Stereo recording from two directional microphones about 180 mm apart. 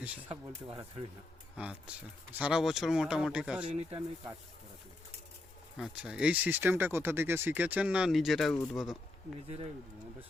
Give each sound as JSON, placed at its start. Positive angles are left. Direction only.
{"t": 0.0, "sound": "speech", "side_deg": -10}
{"t": 2.4, "sound": "speech", "side_deg": -5}
{"t": 3.6, "sound": "a man's voice", "side_deg": -30}
{"t": 5.7, "sound": "speech", "side_deg": -5}